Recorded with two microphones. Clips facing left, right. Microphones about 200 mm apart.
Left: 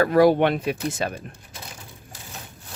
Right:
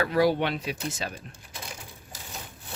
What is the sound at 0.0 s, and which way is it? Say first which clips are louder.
Speech: left 7 dB; 50° left (ahead or behind).